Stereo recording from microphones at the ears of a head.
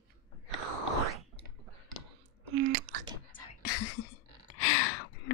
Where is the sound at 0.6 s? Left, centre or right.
Right.